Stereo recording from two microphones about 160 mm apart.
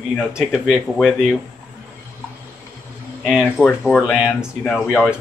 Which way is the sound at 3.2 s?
5° right (ahead or behind).